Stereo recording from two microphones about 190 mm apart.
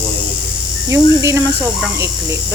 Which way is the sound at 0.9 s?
15° right (ahead or behind).